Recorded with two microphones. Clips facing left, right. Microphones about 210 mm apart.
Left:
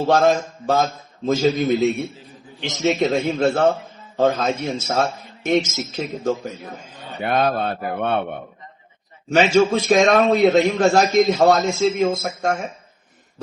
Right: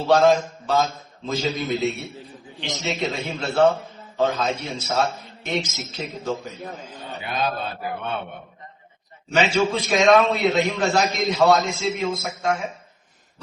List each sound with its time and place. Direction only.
0.0 s a man's voice: 45° left (ahead or behind)
7.2 s a man's voice: 60° left (ahead or behind)
9.3 s a man's voice: 50° left (ahead or behind)